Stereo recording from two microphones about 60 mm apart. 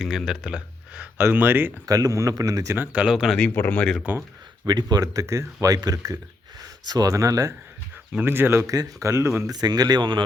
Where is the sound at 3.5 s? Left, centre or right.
Left.